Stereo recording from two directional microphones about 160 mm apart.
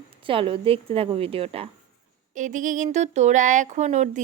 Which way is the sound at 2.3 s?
50° right (ahead or behind).